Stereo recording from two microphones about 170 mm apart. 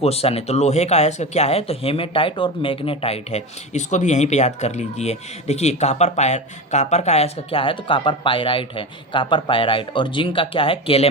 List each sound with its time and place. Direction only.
0.0 s speech: 35° left (ahead or behind)